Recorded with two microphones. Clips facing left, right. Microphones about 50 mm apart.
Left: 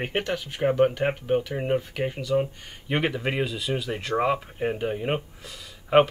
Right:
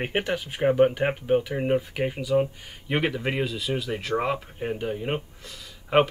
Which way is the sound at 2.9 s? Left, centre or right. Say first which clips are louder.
Even; centre.